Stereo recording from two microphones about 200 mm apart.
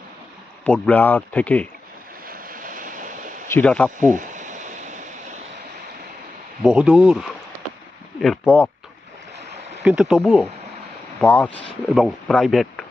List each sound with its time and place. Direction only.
0.6 s speech: 5° left (ahead or behind)
2.2 s vehicle: 45° right (ahead or behind)
3.5 s speech: 5° left (ahead or behind)
4.0 s a sound: 40° right (ahead or behind)
6.6 s speech: 5° right (ahead or behind)
9.5 s stream: 30° right (ahead or behind)
9.8 s speech: 5° right (ahead or behind)